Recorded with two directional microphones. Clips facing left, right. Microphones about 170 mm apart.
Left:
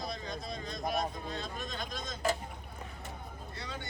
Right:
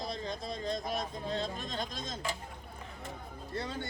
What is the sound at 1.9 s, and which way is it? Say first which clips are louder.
Speech: left 4 dB; 45° left (ahead or behind).